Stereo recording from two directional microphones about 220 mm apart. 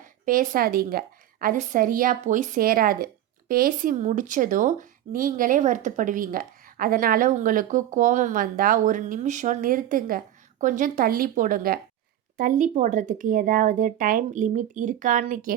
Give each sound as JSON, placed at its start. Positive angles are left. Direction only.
{"t": 0.0, "sound": "speech", "side_deg": -40}